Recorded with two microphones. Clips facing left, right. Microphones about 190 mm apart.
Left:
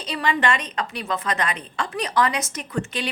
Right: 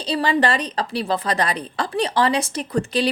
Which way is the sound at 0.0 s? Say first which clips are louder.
Right 4 dB; 35° right (ahead or behind).